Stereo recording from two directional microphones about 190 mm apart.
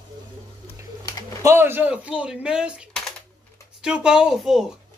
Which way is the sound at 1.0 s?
20° left (ahead or behind).